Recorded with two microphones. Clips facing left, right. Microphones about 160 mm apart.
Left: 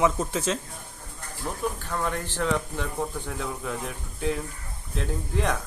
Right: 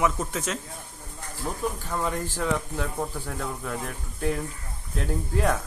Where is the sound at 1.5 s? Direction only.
10° right (ahead or behind).